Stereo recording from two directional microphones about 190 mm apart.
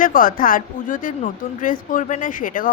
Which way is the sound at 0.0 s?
45° left (ahead or behind).